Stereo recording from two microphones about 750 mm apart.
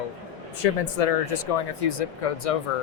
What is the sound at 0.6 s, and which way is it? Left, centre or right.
Speech, left.